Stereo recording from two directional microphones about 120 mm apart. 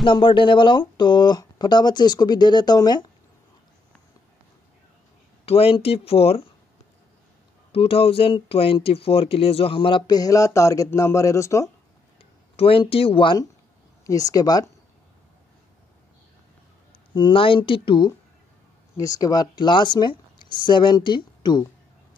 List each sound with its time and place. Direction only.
0.0 s speech: 45° left (ahead or behind)
5.4 s speech: 55° left (ahead or behind)
7.7 s speech: 55° left (ahead or behind); by 11.7 s 25° left (ahead or behind)
12.5 s speech: 50° left (ahead or behind)
14.0 s speech: 30° left (ahead or behind)
17.1 s speech: 45° left (ahead or behind)
18.9 s speech: 30° left (ahead or behind)